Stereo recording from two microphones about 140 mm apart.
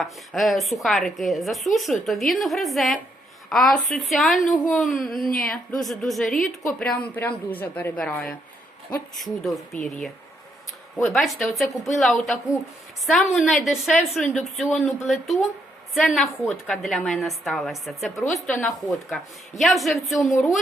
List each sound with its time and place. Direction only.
0.0 s a woman's voice: centre (ahead or behind)
11.1 s speech: centre (ahead or behind)